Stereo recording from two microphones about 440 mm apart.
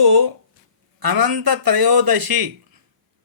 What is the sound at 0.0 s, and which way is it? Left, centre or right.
A man's voice, right.